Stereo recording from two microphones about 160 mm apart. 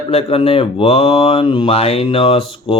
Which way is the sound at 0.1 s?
40° left (ahead or behind).